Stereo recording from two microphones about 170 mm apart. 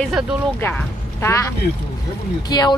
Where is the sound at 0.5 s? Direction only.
10° left (ahead or behind).